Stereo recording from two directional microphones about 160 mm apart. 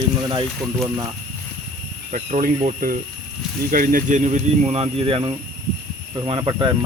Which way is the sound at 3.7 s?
60° right (ahead or behind).